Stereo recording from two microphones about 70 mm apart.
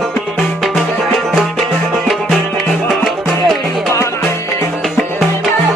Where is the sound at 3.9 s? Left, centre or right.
Left.